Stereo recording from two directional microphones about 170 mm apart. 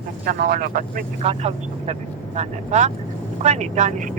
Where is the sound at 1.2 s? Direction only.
40° right (ahead or behind).